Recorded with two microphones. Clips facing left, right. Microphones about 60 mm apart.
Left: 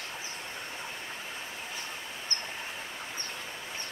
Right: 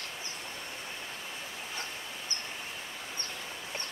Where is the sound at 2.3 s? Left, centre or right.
Left.